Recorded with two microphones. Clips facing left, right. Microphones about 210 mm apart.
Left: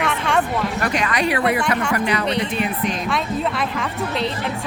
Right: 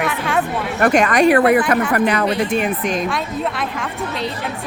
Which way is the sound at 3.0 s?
Centre (ahead or behind).